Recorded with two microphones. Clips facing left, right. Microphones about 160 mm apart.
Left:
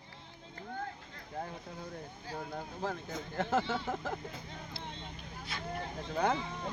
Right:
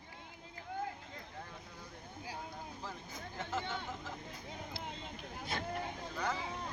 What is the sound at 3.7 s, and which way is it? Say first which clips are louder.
Speech: left 7 dB; 60° left (ahead or behind).